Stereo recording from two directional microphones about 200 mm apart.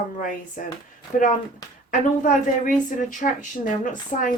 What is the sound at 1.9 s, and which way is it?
Speech, 40° left (ahead or behind).